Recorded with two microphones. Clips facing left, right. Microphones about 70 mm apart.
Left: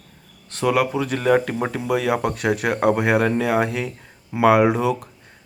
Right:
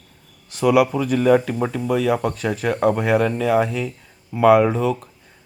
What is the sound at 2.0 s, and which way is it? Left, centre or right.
Speech, left.